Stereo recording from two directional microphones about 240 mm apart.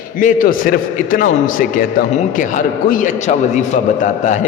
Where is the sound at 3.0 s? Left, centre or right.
Left.